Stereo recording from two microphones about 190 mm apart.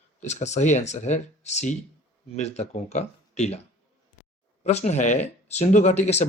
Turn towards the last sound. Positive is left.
turn(degrees=35)  # may be behind; listen again after turning